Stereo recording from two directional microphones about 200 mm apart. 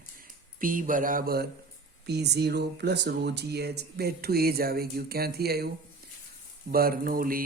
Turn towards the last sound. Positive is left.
turn(degrees=-45)  # may be behind; listen again after turning